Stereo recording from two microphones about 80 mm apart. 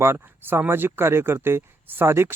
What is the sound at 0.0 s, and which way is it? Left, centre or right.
Speech, right.